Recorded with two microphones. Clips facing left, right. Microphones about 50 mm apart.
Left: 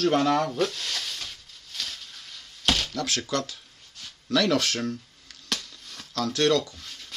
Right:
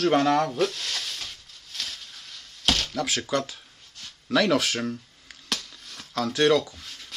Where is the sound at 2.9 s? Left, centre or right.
Centre.